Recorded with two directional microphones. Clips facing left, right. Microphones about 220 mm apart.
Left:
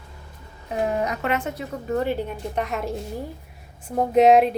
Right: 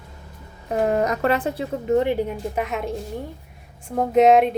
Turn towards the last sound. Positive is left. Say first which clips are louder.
# even
turn(degrees=0)  # may be behind; listen again after turning